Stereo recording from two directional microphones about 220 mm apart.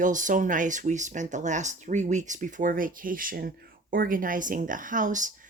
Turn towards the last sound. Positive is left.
turn(degrees=-35)  # may be behind; listen again after turning